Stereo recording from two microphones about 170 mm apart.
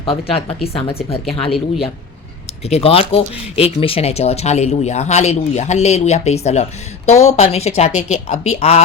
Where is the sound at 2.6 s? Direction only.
35° left (ahead or behind).